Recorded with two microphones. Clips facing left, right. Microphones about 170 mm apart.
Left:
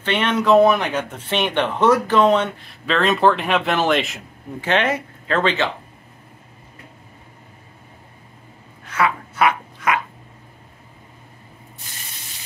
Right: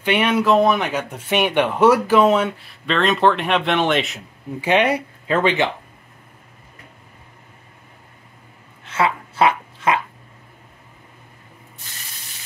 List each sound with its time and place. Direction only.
0.0 s speech: 10° right (ahead or behind)
4.6 s speech: 10° right (ahead or behind)
8.8 s dog: 25° right (ahead or behind)